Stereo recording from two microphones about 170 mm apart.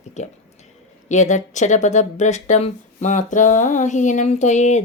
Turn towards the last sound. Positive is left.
turn(degrees=40)  # may be behind; listen again after turning